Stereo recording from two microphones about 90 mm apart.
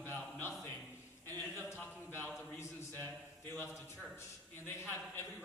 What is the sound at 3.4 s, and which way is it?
Speech, 30° left (ahead or behind).